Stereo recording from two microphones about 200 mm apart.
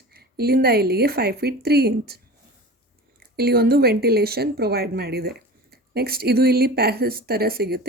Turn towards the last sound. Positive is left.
turn(degrees=-50)  # may be behind; listen again after turning